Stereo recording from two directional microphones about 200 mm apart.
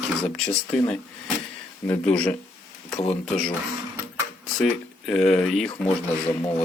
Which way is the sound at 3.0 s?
35° left (ahead or behind).